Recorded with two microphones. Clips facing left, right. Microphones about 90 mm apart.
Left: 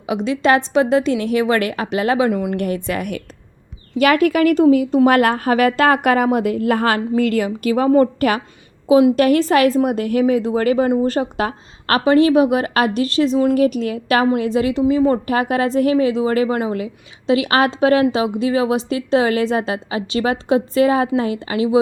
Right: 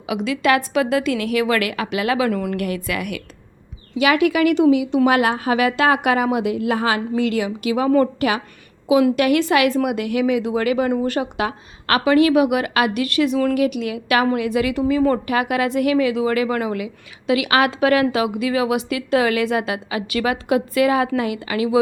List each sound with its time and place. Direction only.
0.0 s a woman's voice: 30° left (ahead or behind)
2.6 s a woman's voice: 30° left (ahead or behind)